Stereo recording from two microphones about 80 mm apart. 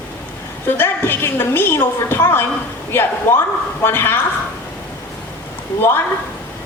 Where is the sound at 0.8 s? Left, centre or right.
Left.